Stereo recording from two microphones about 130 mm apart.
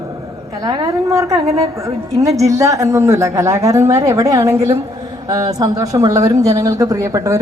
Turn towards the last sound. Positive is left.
turn(degrees=-25)  # may be behind; listen again after turning